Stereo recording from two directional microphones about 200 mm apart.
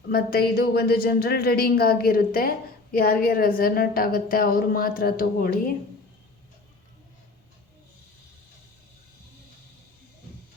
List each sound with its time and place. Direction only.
0.1 s speech: 50° left (ahead or behind)